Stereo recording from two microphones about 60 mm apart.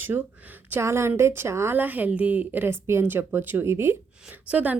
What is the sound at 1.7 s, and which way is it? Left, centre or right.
Speech, right.